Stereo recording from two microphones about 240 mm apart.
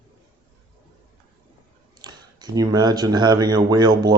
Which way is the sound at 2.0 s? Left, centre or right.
Centre.